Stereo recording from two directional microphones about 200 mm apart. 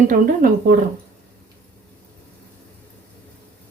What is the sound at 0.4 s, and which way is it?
Speech, 45° right (ahead or behind).